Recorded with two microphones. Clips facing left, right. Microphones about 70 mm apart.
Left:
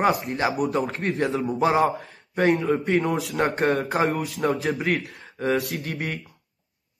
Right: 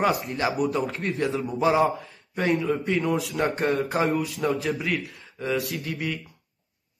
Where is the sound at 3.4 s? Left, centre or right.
Left.